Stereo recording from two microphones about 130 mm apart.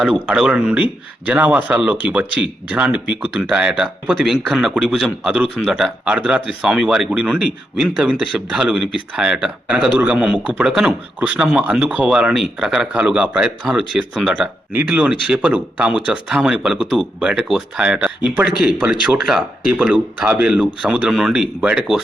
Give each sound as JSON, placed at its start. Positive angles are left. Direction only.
{"t": 0.0, "sound": "speech", "side_deg": -5}